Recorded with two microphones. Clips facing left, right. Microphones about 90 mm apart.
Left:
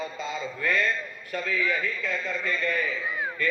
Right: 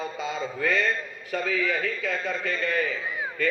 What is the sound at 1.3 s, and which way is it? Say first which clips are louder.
A man's voice: right 2 dB; 85° right.